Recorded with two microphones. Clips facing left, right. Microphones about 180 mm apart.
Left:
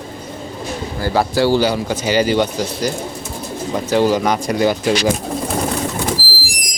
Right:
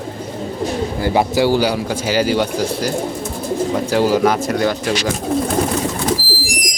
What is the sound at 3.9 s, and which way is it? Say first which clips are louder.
Speech: left 1 dB; 5° right (ahead or behind).